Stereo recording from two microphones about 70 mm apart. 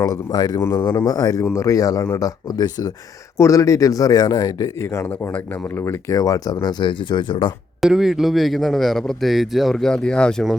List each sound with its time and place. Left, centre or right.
0.0 s a man's voice: left
3.3 s speech: left
4.8 s speech: left
7.8 s a man's voice: centre